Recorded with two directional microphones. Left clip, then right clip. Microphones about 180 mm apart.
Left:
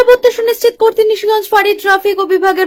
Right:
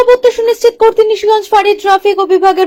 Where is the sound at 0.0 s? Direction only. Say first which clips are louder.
Right 1 dB; centre (ahead or behind).